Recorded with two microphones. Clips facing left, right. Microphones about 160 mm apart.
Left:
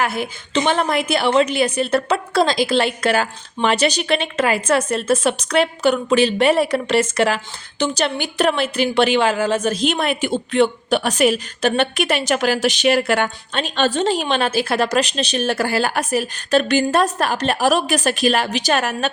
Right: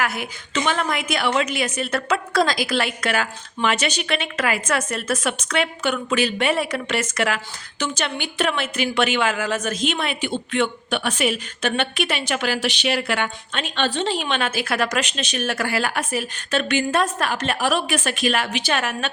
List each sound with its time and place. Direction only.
0.0 s a woman's voice: 30° left (ahead or behind)